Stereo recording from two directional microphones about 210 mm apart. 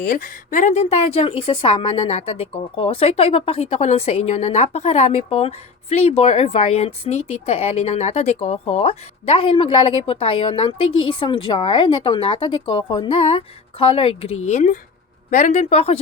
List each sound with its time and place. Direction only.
0.0 s a woman's voice: 40° left (ahead or behind)
7.2 s speech: 90° left
7.4 s a woman's voice: 30° left (ahead or behind)